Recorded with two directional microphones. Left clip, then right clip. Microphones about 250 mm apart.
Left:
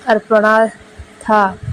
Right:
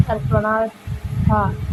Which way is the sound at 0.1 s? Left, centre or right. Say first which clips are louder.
Left 10 dB; left.